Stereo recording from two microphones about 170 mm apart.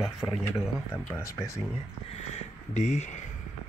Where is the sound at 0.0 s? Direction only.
Centre (ahead or behind).